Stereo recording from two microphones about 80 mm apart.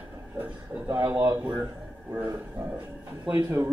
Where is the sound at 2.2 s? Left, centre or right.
Right.